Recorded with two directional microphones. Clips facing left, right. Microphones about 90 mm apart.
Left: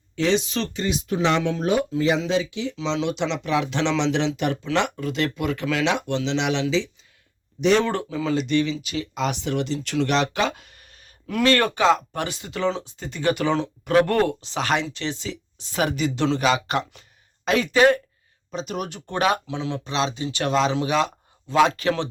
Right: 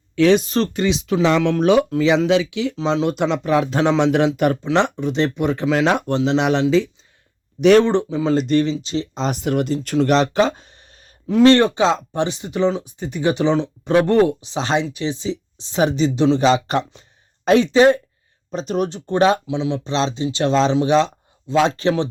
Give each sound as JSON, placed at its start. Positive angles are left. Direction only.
{"t": 0.2, "sound": "speech", "side_deg": -55}
{"t": 0.8, "sound": "speech", "side_deg": -90}
{"t": 2.7, "sound": "speech", "side_deg": -40}
{"t": 4.6, "sound": "speech", "side_deg": -30}
{"t": 7.9, "sound": "speech", "side_deg": -25}
{"t": 8.3, "sound": "speech", "side_deg": -40}
{"t": 8.7, "sound": "speech", "side_deg": -30}
{"t": 9.3, "sound": "speech", "side_deg": -50}
{"t": 16.4, "sound": "speech", "side_deg": -35}
{"t": 18.5, "sound": "speech", "side_deg": -35}
{"t": 19.9, "sound": "speech", "side_deg": -30}